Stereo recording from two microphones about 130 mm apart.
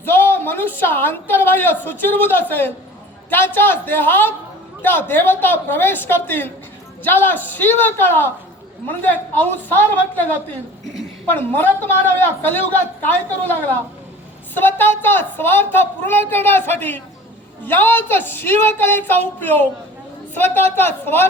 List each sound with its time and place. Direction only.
0.0 s a woman's voice: 15° left (ahead or behind)
14.5 s a woman's voice: 15° left (ahead or behind)